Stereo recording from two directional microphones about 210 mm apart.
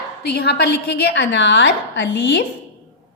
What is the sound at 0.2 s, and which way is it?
A woman's voice, 50° left (ahead or behind).